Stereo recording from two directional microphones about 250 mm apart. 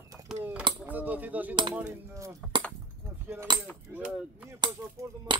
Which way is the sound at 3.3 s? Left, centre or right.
Centre.